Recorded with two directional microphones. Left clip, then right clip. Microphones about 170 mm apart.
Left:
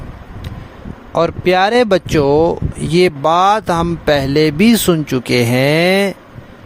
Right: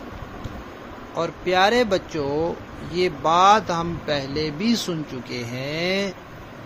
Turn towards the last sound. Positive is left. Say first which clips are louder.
# left 12 dB
turn(degrees=80)